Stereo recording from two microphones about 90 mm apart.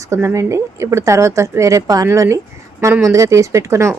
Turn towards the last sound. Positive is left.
turn(degrees=-30)  # may be behind; listen again after turning